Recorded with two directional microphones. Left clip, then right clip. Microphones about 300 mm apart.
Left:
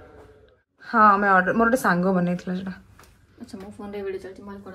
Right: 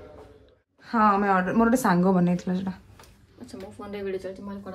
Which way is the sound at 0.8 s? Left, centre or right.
Centre.